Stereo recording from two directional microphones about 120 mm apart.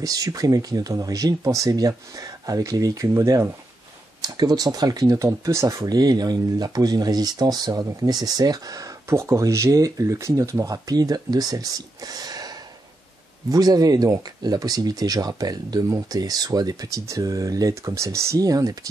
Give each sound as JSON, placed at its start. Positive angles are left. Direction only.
{"t": 0.0, "sound": "speech", "side_deg": -30}